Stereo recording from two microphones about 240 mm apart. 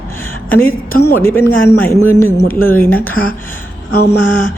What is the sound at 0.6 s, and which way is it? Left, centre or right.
Speech, left.